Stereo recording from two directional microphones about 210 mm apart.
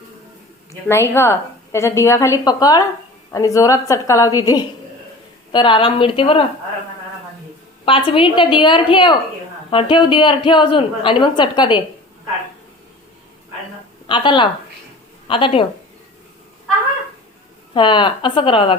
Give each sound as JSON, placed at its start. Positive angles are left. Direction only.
{"t": 0.9, "sound": "a woman's voice", "side_deg": 10}
{"t": 7.9, "sound": "a woman's voice", "side_deg": 25}
{"t": 14.1, "sound": "a woman's voice", "side_deg": 25}
{"t": 17.7, "sound": "a woman's voice", "side_deg": 20}